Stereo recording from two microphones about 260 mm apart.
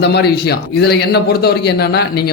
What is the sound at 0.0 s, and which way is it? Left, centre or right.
A man's voice, left.